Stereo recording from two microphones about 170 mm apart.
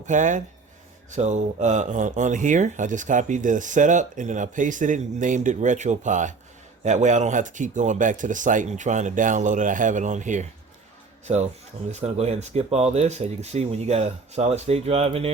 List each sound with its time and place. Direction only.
0.0 s speech: 45° right (ahead or behind)
11.9 s speech: 40° right (ahead or behind)